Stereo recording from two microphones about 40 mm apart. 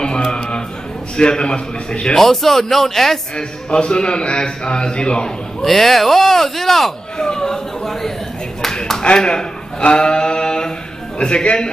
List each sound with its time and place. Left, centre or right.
0.0 s a man's voice: left
2.1 s speech: centre
3.3 s a man's voice: left
5.6 s speech: centre
7.2 s speech: centre
9.0 s a man's voice: left